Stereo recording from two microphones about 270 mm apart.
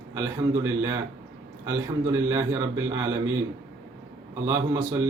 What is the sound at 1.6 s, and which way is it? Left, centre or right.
Speech, centre.